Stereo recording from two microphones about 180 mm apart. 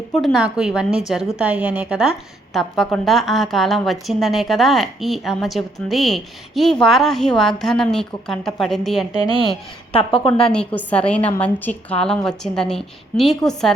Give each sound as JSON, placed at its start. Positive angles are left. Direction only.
{"t": 0.2, "sound": "a woman's voice", "side_deg": 0}
{"t": 9.9, "sound": "a woman's voice", "side_deg": 30}
{"t": 10.5, "sound": "a woman's voice", "side_deg": 5}